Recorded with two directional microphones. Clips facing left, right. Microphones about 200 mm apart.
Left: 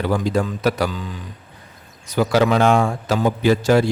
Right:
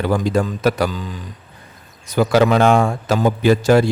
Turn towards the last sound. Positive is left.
turn(degrees=-50)  # may be behind; listen again after turning